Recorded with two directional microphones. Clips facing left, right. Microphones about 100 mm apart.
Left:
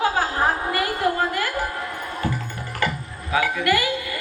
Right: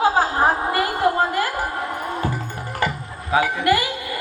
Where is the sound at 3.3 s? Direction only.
30° right (ahead or behind).